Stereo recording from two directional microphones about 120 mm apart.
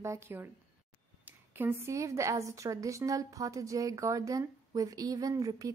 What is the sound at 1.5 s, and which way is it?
A woman's voice, 20° right (ahead or behind).